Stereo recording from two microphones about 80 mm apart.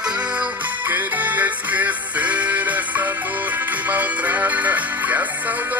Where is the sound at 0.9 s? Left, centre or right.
Right.